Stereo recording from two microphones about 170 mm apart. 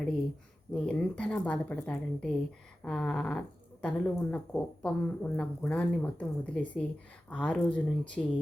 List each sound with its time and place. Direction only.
0.7 s speech: 5° left (ahead or behind)